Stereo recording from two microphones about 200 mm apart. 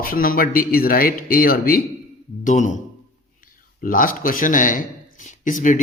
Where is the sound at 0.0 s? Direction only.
45° left (ahead or behind).